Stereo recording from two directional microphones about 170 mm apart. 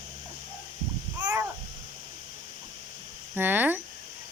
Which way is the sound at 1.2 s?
10° right (ahead or behind).